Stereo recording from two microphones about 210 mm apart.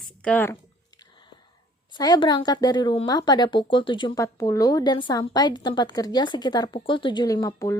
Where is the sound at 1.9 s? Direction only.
20° left (ahead or behind).